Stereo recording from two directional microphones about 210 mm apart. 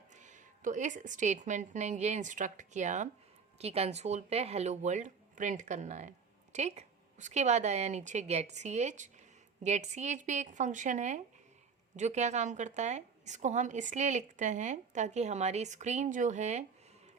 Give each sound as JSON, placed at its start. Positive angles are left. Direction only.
{"t": 0.1, "sound": "speech", "side_deg": -35}